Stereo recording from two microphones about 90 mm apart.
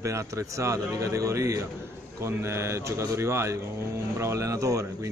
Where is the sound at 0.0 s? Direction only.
35° right (ahead or behind).